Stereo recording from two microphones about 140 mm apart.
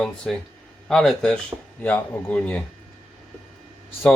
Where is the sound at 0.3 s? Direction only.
5° left (ahead or behind).